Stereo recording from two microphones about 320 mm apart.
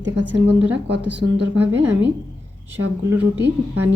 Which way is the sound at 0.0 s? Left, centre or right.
Right.